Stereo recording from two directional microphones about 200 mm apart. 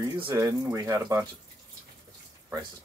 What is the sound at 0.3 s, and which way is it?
Speech, 10° right (ahead or behind).